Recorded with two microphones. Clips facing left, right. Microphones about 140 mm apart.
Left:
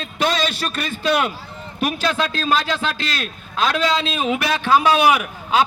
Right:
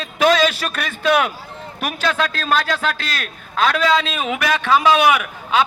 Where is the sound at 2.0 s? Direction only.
30° left (ahead or behind).